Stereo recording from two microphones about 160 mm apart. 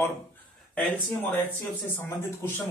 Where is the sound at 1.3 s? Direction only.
10° left (ahead or behind).